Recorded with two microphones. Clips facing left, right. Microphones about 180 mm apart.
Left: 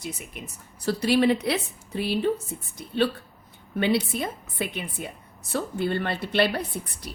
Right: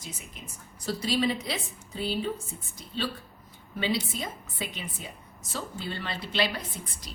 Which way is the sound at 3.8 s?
60° left (ahead or behind).